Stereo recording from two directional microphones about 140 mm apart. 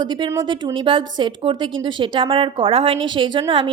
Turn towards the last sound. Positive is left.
turn(degrees=-35)  # may be behind; listen again after turning